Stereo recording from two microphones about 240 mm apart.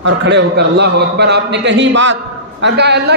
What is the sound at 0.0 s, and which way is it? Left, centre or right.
A man's voice, right.